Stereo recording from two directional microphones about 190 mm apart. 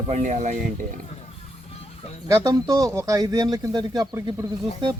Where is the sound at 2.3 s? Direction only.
15° right (ahead or behind).